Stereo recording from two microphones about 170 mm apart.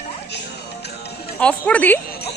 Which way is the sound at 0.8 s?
75° left (ahead or behind).